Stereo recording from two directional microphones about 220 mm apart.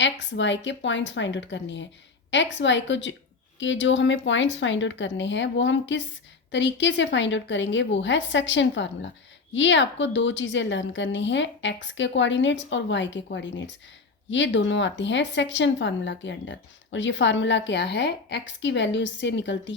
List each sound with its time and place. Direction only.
0.0 s speech: 55° left (ahead or behind)